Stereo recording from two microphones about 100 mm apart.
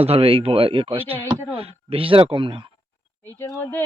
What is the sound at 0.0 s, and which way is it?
Speech, 75° right (ahead or behind).